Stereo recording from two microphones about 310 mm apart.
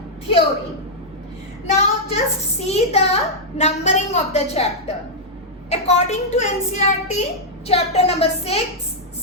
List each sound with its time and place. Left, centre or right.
1.7 s a child's voice: centre